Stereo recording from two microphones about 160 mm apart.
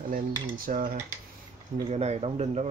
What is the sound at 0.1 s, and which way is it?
Speech, 60° right (ahead or behind).